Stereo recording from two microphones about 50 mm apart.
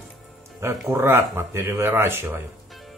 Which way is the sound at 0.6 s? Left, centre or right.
Right.